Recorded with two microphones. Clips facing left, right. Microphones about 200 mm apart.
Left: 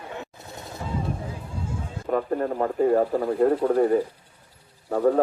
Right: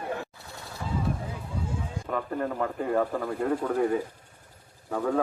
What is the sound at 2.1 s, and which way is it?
Speech, 40° left (ahead or behind).